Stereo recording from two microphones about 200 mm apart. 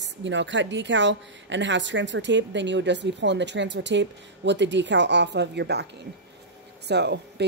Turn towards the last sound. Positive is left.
turn(degrees=-55)  # may be behind; listen again after turning